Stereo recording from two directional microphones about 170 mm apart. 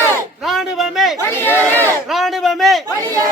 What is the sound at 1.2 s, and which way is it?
Chatter, 10° left (ahead or behind).